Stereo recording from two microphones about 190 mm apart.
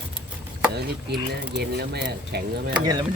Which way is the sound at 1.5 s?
60° right (ahead or behind).